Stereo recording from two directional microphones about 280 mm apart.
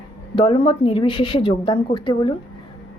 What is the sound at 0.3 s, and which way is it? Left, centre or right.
A woman's voice, centre.